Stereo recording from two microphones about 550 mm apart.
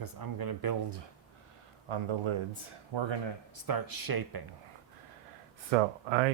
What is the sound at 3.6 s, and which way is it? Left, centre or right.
Speech, right.